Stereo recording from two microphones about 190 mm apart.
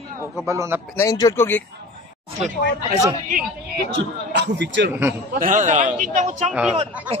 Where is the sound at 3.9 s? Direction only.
65° right (ahead or behind).